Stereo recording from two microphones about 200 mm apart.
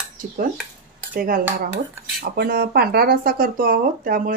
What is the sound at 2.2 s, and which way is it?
Speech, 50° right (ahead or behind).